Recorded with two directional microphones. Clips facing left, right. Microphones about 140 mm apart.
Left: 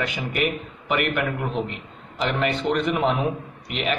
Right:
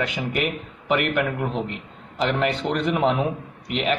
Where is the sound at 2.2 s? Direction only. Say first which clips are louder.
Right 1 dB; 30° right (ahead or behind).